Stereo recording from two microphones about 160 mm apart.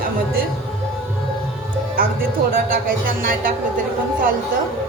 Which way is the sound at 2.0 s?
65° right (ahead or behind).